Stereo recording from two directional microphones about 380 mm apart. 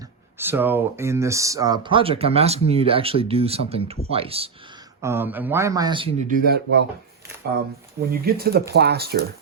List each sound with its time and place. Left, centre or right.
0.3 s speech: centre
6.2 s speech: right
8.1 s speech: right